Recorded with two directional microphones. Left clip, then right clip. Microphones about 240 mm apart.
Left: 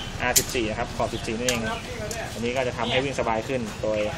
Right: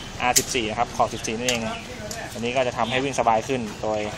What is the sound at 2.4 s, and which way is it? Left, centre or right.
Speech, right.